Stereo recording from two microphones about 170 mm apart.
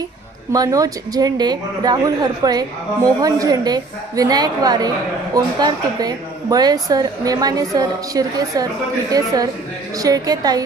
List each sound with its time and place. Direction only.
0.5 s a woman's voice: 20° right (ahead or behind)